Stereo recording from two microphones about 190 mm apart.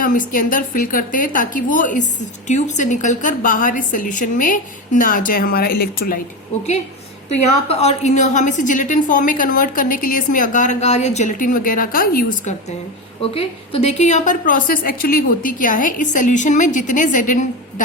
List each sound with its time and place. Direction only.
0.0 s a woman's voice: 45° left (ahead or behind)
7.7 s a woman's voice: 35° left (ahead or behind)
13.3 s a woman's voice: 30° left (ahead or behind)